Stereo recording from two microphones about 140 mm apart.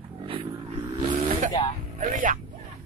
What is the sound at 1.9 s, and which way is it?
Vehicle, 70° right (ahead or behind).